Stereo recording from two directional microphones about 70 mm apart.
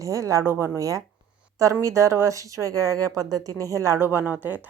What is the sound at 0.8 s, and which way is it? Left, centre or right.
Speech, right.